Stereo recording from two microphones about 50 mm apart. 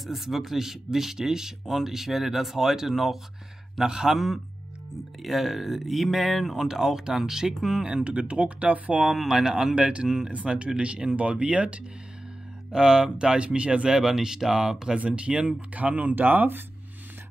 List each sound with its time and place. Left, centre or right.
0.0 s speech: centre
7.8 s speech: right
9.0 s speech: centre; by 10.0 s right
10.0 s speech: centre
10.3 s speech: right
12.7 s speech: centre
15.0 s speech: right